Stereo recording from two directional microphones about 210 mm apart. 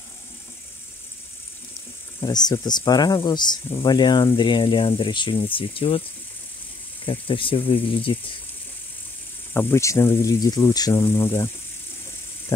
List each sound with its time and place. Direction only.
2.1 s speech: 20° left (ahead or behind)
7.1 s speech: 25° left (ahead or behind)
9.5 s speech: 10° left (ahead or behind)